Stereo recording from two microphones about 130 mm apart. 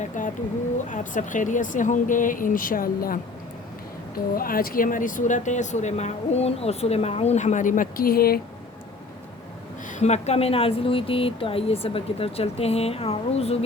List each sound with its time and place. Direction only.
0.2 s a sound: 85° left
0.9 s speech: 85° left
4.4 s speech: 90° left
9.9 s speech: 60° left (ahead or behind)